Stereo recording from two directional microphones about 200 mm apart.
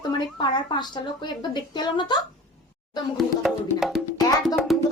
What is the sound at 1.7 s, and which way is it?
Speech, 25° left (ahead or behind).